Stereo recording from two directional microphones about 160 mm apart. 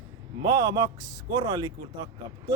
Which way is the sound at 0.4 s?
25° right (ahead or behind).